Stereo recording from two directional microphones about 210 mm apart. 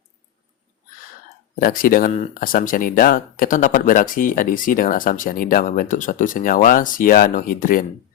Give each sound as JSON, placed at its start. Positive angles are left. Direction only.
{"t": 1.5, "sound": "speech", "side_deg": 40}